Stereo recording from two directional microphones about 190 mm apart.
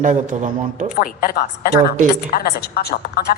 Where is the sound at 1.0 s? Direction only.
50° left (ahead or behind).